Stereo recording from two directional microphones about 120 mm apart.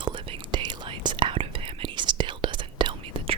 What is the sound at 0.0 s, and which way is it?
Whispering, 45° right (ahead or behind).